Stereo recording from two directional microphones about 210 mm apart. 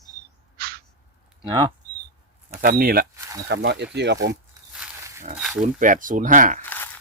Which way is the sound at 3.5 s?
55° right (ahead or behind).